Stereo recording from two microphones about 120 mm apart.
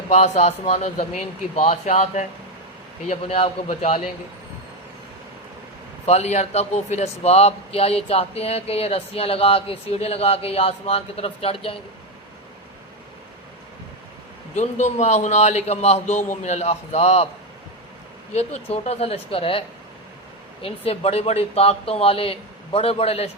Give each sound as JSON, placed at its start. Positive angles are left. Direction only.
{"t": 0.2, "sound": "a man's voice", "side_deg": 70}
{"t": 3.1, "sound": "a man's voice", "side_deg": 55}
{"t": 6.1, "sound": "a man's voice", "side_deg": 65}
{"t": 14.5, "sound": "a man's voice", "side_deg": 70}
{"t": 18.3, "sound": "a man's voice", "side_deg": 60}